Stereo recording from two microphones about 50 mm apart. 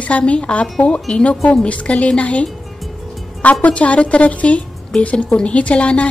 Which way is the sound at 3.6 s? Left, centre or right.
Left.